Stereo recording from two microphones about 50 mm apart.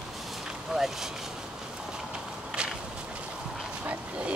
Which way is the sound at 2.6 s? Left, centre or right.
Centre.